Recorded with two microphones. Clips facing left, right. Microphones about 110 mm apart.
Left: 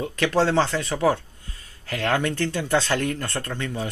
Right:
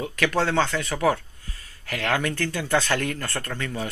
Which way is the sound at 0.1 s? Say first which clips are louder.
Left 3 dB; 30° left (ahead or behind).